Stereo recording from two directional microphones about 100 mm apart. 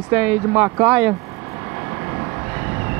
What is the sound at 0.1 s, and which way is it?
Speech, 15° right (ahead or behind).